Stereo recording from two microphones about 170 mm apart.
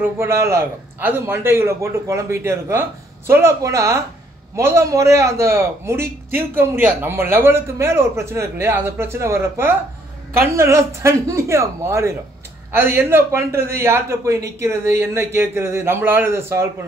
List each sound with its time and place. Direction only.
0.0 s a man's voice: 15° right (ahead or behind)